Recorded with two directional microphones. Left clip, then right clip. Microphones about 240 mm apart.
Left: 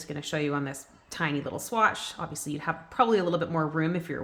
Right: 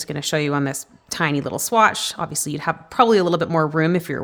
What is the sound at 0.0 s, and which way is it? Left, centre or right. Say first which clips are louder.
Speech: right 9 dB; right.